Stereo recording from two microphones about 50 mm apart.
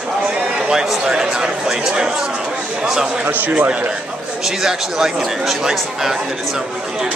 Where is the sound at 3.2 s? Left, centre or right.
Right.